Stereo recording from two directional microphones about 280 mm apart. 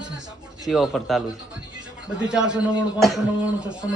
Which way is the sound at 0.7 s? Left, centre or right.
Centre.